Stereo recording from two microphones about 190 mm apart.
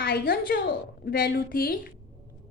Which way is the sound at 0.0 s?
55° left (ahead or behind).